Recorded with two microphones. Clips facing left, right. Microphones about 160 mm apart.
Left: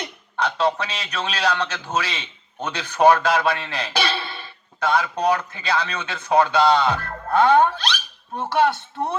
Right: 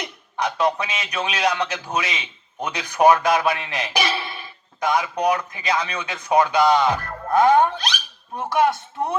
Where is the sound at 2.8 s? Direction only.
15° right (ahead or behind).